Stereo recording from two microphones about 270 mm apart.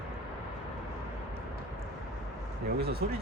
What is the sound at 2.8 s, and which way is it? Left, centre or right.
Speech, right.